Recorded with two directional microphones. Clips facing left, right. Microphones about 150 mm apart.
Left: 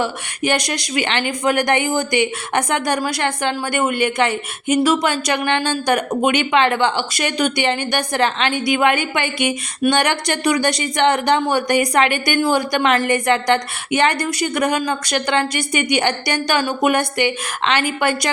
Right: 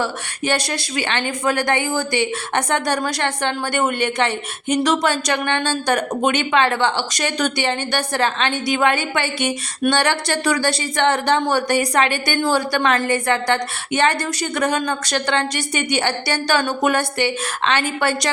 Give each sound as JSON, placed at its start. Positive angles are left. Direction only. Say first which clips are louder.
{"t": 0.0, "sound": "a woman's voice", "louder": "left 2 dB", "side_deg": 15}